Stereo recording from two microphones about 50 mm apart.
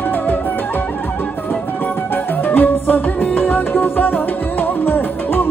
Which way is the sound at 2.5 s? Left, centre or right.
Left.